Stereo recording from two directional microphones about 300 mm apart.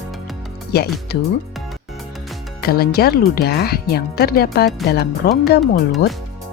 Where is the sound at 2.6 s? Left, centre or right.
Left.